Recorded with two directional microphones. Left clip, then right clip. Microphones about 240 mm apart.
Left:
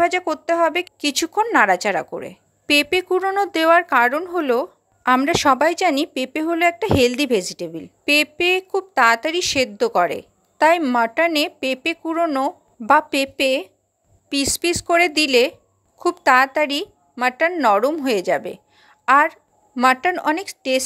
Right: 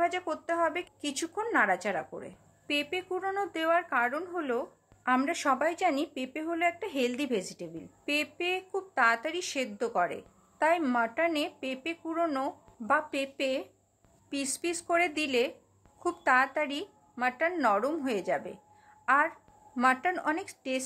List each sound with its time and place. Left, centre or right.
0.0 s speech: left